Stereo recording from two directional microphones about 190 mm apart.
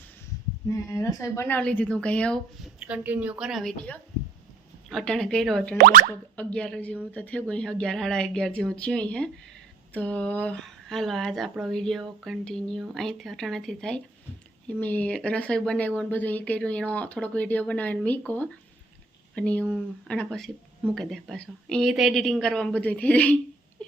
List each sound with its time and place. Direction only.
0.7 s speech: 15° left (ahead or behind)
2.7 s speech: 5° right (ahead or behind)
5.7 s speech: 45° right (ahead or behind)
6.3 s speech: 5° left (ahead or behind)